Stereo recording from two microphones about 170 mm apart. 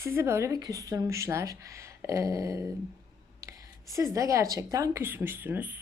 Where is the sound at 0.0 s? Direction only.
15° right (ahead or behind).